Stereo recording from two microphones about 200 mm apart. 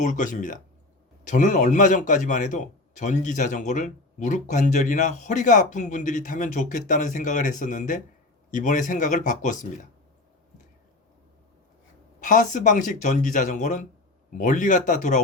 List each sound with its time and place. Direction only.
0.0 s a man's voice: 40° left (ahead or behind)
12.2 s a man's voice: 40° left (ahead or behind)